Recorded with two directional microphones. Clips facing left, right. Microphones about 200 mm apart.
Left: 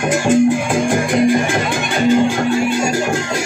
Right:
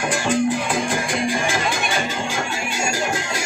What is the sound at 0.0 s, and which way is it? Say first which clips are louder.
Music: left 7 dB; 45° left (ahead or behind).